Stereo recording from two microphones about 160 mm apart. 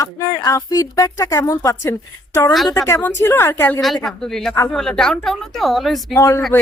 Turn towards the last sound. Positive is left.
turn(degrees=20)  # may be behind; listen again after turning